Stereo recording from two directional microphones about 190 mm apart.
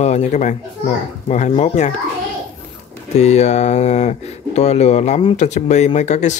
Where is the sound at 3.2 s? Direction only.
35° left (ahead or behind).